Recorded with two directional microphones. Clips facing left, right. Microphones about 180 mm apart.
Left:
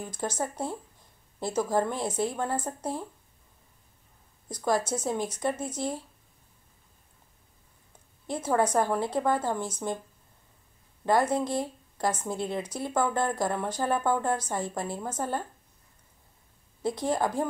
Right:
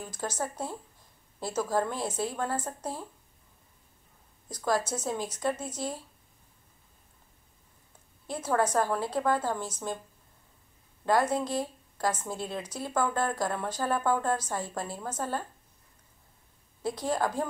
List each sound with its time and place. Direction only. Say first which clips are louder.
0.0 s a woman's voice: left 2 dB; 15° left (ahead or behind)
4.6 s a woman's voice: left 2 dB; 15° left (ahead or behind)
8.3 s a woman's voice: left 2 dB; 15° left (ahead or behind)
11.1 s a woman's voice: left 1 dB; 15° left (ahead or behind)
17.0 s a woman's voice: left 2 dB; 15° left (ahead or behind)